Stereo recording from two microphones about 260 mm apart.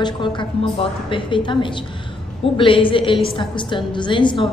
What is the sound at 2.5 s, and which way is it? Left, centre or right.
A woman's voice, centre.